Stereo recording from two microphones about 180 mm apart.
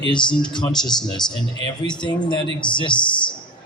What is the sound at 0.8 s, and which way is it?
Speech, centre (ahead or behind).